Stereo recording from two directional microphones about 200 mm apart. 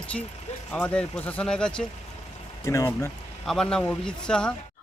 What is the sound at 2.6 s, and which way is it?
Speech, 15° left (ahead or behind).